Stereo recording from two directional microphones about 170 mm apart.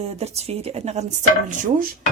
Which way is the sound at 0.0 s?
40° right (ahead or behind).